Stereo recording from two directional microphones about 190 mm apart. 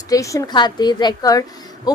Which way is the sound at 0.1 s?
15° left (ahead or behind).